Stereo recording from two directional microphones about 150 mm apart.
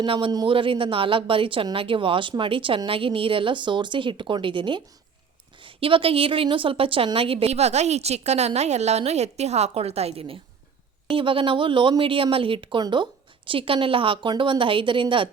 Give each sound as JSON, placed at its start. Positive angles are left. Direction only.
{"t": 0.0, "sound": "a woman's voice", "side_deg": -35}